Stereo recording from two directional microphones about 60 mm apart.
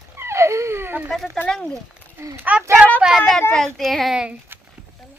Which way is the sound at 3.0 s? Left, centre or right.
Centre.